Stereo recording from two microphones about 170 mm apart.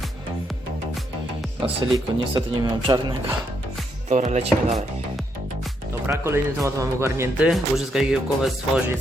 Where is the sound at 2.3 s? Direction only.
25° right (ahead or behind).